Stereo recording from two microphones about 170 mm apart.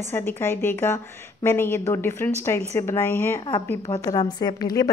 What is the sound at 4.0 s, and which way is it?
Speech, 25° left (ahead or behind).